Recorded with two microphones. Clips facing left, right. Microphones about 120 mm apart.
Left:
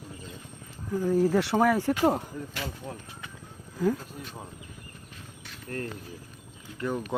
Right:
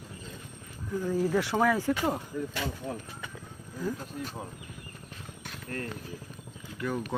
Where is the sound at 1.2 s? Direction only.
35° left (ahead or behind).